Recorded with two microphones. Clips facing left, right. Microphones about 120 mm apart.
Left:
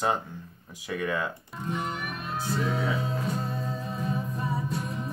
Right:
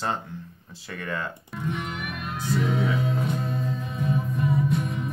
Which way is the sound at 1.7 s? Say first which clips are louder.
Even; 35° left (ahead or behind).